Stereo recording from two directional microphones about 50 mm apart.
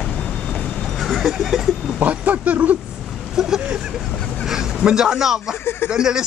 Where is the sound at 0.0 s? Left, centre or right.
Centre.